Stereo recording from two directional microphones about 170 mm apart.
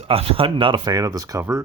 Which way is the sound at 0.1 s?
35° right (ahead or behind).